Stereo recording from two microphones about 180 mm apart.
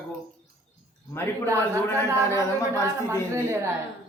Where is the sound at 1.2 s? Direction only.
15° left (ahead or behind).